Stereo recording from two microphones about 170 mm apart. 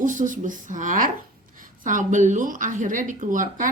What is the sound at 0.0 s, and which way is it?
Speech, 50° right (ahead or behind).